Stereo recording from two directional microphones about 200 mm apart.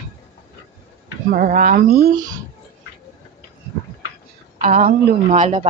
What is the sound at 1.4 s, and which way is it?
Speech, 45° right (ahead or behind).